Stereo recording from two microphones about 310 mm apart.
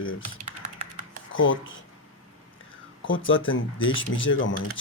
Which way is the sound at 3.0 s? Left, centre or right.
Left.